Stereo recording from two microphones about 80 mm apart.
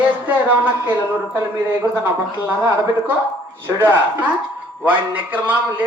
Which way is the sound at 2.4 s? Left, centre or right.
Right.